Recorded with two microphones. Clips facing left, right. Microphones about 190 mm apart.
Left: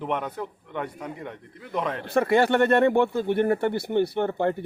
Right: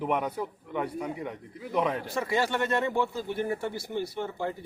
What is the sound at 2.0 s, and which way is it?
Speech, 60° left (ahead or behind).